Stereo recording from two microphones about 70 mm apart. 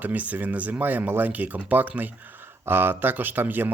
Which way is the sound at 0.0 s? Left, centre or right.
Right.